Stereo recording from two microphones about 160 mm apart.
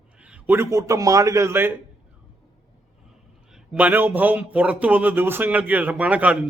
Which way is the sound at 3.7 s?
10° right (ahead or behind).